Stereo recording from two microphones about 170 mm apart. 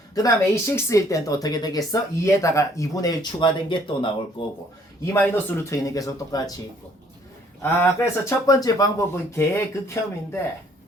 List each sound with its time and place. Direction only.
0.1 s speech: 20° left (ahead or behind)
5.0 s speech: 10° left (ahead or behind)
7.6 s speech: 15° left (ahead or behind)